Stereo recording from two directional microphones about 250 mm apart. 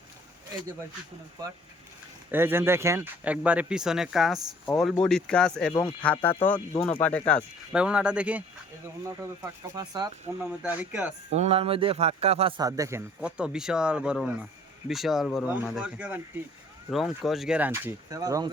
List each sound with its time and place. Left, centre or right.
2.3 s speech: centre
10.4 s speech: centre
11.3 s speech: right